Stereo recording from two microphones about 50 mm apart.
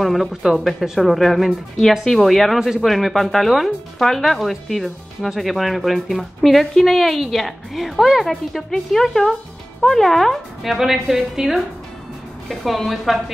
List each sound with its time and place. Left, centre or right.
0.0 s speech: centre